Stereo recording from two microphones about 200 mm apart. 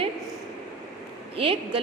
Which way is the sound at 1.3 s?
30° right (ahead or behind).